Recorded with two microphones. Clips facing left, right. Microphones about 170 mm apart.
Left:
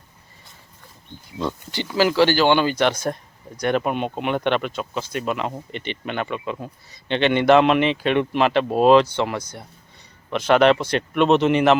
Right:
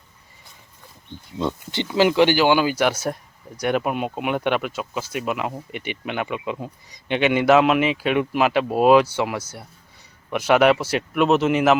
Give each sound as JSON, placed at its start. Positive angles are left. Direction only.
{"t": 1.4, "sound": "speech", "side_deg": -25}